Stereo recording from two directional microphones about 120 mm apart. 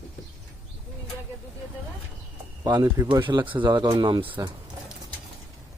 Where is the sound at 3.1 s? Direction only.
40° right (ahead or behind).